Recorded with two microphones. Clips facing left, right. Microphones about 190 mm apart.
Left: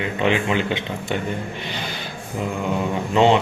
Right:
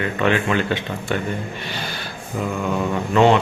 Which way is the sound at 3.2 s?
20° left (ahead or behind).